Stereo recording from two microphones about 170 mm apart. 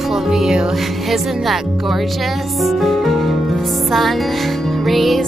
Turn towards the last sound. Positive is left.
turn(degrees=0)  # may be behind; listen again after turning